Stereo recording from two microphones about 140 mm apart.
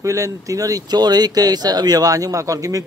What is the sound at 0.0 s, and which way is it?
Speech, 25° right (ahead or behind).